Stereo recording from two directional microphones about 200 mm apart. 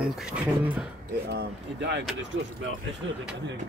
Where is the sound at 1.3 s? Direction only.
55° right (ahead or behind).